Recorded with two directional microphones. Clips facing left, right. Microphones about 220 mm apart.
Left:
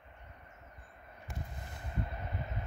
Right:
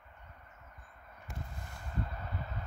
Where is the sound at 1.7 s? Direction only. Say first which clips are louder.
Right 1 dB; 20° left (ahead or behind).